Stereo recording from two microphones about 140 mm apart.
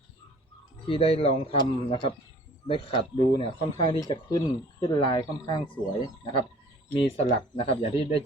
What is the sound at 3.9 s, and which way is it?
Speech, 25° left (ahead or behind).